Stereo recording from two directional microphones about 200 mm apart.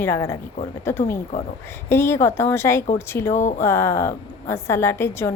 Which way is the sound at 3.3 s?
40° left (ahead or behind).